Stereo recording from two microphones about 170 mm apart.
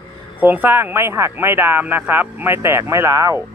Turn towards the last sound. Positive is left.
turn(degrees=-20)  # may be behind; listen again after turning